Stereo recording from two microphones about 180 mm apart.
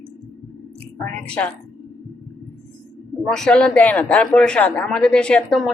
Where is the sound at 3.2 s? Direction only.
5° left (ahead or behind).